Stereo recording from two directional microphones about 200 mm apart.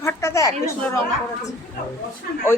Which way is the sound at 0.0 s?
15° left (ahead or behind).